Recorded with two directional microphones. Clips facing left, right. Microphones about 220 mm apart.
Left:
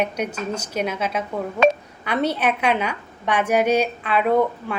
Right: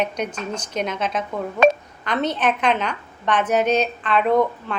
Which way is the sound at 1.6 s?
45° right (ahead or behind).